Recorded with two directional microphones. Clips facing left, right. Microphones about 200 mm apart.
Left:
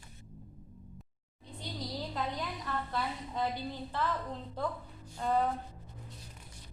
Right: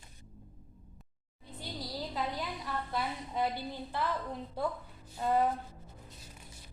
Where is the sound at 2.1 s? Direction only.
5° right (ahead or behind).